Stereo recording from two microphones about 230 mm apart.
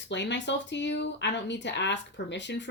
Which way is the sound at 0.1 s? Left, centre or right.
Left.